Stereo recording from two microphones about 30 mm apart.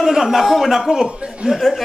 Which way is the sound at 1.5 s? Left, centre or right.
Centre.